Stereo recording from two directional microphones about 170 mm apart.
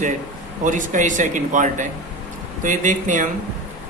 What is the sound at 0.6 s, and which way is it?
Speech, 50° right (ahead or behind).